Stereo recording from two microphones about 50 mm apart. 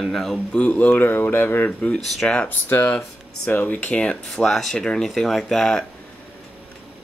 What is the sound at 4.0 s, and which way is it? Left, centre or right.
Speech, centre.